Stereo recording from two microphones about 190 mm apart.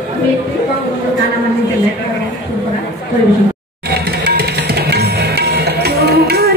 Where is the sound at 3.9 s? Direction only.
60° right (ahead or behind).